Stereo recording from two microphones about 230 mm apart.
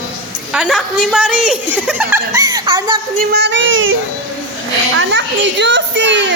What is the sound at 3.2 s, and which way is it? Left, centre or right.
Speech, right.